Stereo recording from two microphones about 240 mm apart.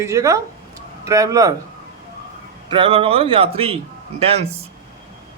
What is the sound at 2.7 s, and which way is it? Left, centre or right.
A man's voice, right.